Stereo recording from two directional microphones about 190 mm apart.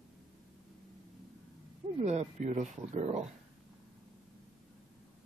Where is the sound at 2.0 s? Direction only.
35° right (ahead or behind).